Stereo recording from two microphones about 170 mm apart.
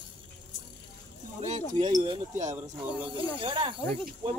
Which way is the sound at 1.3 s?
45° right (ahead or behind).